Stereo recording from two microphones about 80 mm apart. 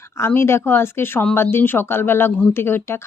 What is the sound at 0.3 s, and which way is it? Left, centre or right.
Speech, left.